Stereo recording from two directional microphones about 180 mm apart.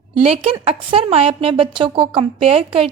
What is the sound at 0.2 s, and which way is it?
A woman's voice, 35° right (ahead or behind).